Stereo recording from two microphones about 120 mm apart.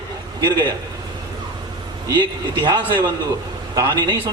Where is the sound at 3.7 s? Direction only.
30° right (ahead or behind).